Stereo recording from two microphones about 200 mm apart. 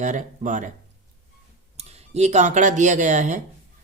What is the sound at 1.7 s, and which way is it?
Speech, 30° right (ahead or behind).